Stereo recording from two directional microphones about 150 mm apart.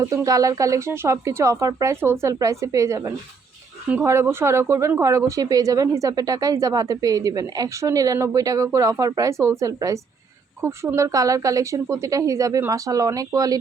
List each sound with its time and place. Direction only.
0.0 s speech: 20° right (ahead or behind)